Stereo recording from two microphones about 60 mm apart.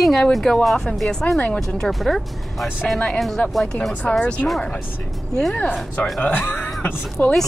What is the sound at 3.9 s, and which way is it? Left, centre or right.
Speech, left.